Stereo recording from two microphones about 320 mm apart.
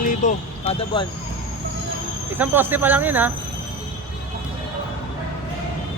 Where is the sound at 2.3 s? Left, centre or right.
Centre.